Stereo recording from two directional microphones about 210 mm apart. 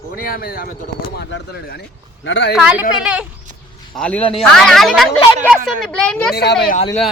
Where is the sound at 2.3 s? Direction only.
60° left (ahead or behind).